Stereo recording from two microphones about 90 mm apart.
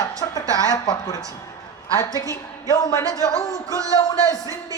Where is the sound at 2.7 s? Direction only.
40° left (ahead or behind).